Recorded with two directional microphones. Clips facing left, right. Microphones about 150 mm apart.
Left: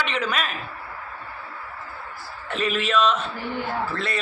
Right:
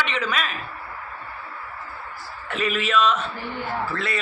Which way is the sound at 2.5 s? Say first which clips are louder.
Even; 5° right (ahead or behind).